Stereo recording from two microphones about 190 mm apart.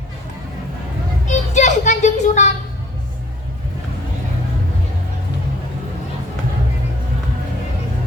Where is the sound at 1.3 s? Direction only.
40° left (ahead or behind).